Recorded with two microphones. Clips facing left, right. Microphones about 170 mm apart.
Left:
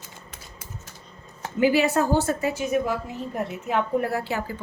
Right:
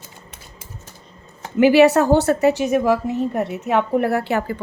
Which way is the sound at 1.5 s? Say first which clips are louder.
Right 8 dB; 75° right (ahead or behind).